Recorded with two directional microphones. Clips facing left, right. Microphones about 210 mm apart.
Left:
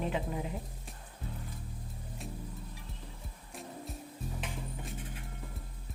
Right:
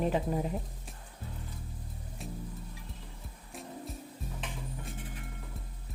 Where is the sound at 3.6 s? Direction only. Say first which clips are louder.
Right 1 dB; centre (ahead or behind).